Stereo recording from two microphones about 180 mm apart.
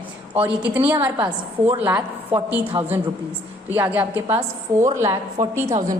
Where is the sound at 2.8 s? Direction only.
25° right (ahead or behind).